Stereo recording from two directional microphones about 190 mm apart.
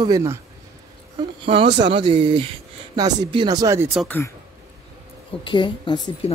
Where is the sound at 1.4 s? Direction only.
25° right (ahead or behind).